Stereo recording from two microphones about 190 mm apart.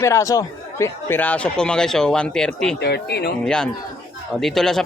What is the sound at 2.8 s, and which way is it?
Speech, 60° left (ahead or behind).